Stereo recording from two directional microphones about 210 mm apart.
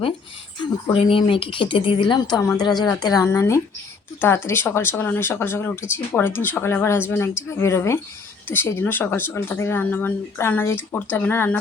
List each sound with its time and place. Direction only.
0.9 s a woman's voice: 25° left (ahead or behind); by 11.5 s 10° left (ahead or behind)